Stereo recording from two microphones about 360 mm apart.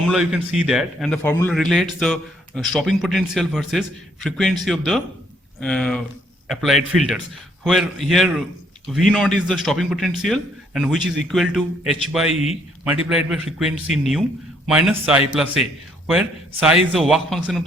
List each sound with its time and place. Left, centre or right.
0.0 s a man's voice: centre
12.3 s speech: centre
13.1 s a man's voice: centre